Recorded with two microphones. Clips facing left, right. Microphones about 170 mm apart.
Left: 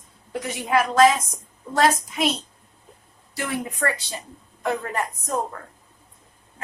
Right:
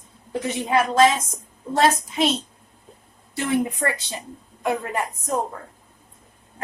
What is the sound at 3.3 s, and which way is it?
A woman's voice, 20° right (ahead or behind).